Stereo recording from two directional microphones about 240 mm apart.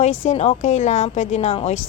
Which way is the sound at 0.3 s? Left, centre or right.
Left.